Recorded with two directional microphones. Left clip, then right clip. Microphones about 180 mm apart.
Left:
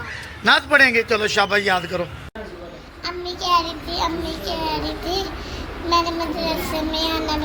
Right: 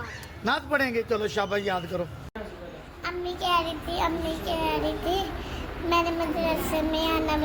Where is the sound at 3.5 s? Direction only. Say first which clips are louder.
Left 6 dB; 10° right (ahead or behind).